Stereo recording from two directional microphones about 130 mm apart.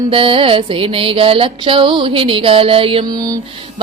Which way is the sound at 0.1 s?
45° right (ahead or behind).